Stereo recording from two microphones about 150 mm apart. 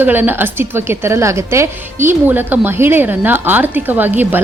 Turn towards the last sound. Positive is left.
turn(degrees=-10)  # may be behind; listen again after turning